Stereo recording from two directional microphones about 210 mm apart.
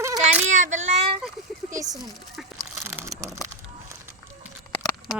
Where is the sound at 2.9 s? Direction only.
10° right (ahead or behind).